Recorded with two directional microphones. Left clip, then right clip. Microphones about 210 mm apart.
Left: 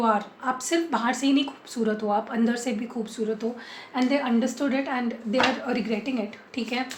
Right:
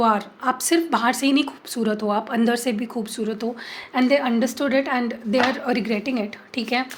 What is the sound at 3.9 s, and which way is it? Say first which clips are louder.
A woman's voice: right 5 dB; 55° right (ahead or behind).